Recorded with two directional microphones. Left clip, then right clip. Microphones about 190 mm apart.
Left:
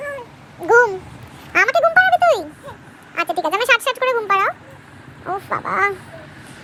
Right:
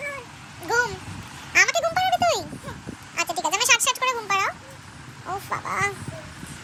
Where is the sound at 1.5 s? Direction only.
10° left (ahead or behind).